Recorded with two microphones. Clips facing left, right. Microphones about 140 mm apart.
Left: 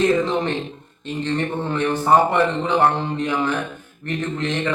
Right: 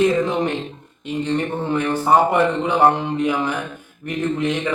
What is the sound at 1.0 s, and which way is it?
A man's voice, 10° right (ahead or behind).